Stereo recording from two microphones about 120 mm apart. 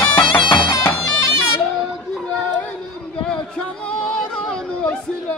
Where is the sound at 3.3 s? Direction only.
10° left (ahead or behind).